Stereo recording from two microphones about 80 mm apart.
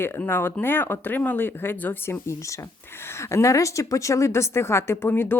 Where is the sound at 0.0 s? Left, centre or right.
Left.